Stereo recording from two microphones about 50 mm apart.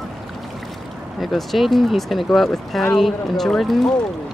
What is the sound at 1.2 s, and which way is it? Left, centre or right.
Speech, centre.